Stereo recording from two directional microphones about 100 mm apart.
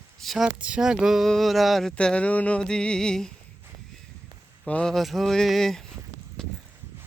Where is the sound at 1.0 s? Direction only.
Centre (ahead or behind).